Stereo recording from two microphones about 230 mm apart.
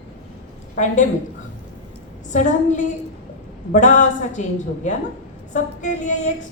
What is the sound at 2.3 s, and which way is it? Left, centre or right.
A woman's voice, left.